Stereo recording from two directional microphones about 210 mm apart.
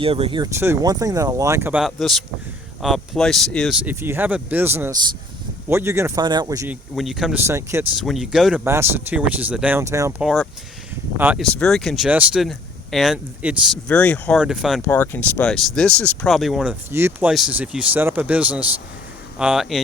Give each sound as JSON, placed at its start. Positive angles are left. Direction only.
{"t": 0.0, "sound": "speech", "side_deg": -25}
{"t": 3.8, "sound": "speech", "side_deg": -10}
{"t": 6.9, "sound": "speech", "side_deg": 0}
{"t": 7.4, "sound": "speech", "side_deg": -10}
{"t": 8.0, "sound": "speech", "side_deg": 0}
{"t": 11.4, "sound": "speech", "side_deg": 5}
{"t": 13.8, "sound": "speech", "side_deg": 5}
{"t": 14.8, "sound": "speech", "side_deg": 10}